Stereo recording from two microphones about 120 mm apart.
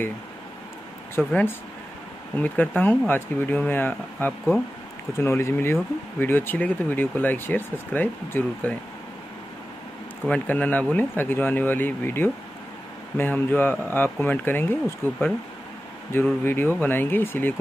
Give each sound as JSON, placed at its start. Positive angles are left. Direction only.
{"t": 1.1, "sound": "speech", "side_deg": 20}
{"t": 10.2, "sound": "speech", "side_deg": 10}
{"t": 16.4, "sound": "speech", "side_deg": 15}